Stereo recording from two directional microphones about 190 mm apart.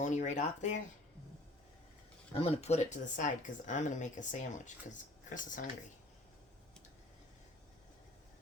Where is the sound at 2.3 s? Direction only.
30° left (ahead or behind).